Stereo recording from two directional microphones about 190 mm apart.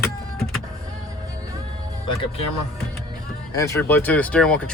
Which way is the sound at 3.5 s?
15° left (ahead or behind).